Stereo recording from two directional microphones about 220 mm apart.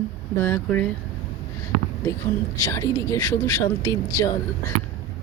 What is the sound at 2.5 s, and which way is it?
Speech, 15° left (ahead or behind).